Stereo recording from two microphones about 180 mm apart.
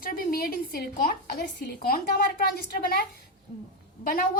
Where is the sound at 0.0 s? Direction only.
50° left (ahead or behind).